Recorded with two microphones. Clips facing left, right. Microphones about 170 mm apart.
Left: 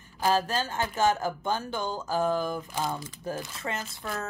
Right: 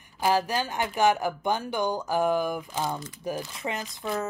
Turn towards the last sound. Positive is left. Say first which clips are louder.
# right 4 dB
turn(degrees=-15)  # may be behind; listen again after turning